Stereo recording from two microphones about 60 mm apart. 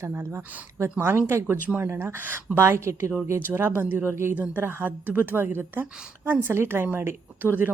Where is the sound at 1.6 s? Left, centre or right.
Right.